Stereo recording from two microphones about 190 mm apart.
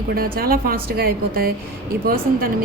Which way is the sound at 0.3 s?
50° right (ahead or behind).